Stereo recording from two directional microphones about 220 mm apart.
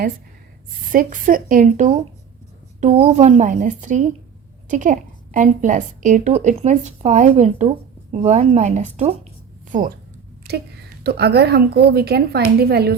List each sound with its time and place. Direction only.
0.9 s a woman's voice: 40° right (ahead or behind)
11.0 s a woman's voice: 45° right (ahead or behind)